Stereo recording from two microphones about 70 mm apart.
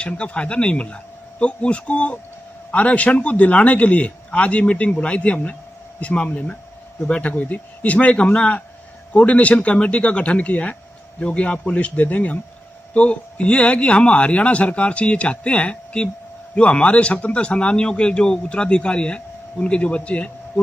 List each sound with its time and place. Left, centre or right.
0.0 s a man's voice: centre